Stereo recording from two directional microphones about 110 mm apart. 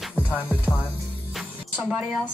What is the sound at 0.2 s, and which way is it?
Music, 10° right (ahead or behind).